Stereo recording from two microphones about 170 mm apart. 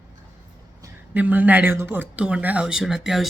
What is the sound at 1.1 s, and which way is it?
Speech, 10° right (ahead or behind).